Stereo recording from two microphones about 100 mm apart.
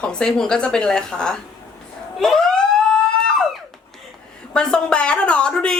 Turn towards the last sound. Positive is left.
turn(degrees=10)  # may be behind; listen again after turning